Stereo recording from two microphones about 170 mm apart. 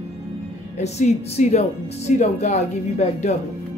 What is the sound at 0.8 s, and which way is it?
Speech, 40° left (ahead or behind).